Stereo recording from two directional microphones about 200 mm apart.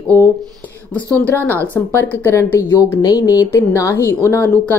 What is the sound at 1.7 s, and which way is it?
A woman's voice, 10° left (ahead or behind).